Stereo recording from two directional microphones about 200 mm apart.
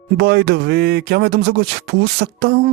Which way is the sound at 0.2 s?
55° right (ahead or behind).